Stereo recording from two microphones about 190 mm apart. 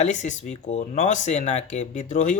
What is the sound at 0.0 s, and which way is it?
Speech, 40° left (ahead or behind).